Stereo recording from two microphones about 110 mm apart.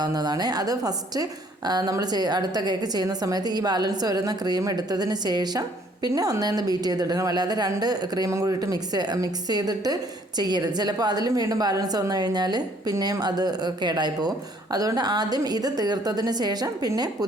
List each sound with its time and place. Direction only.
0.0 s a woman's voice: 40° right (ahead or behind)